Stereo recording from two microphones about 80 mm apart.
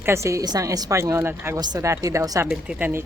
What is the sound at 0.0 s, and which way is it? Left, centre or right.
Speech, right.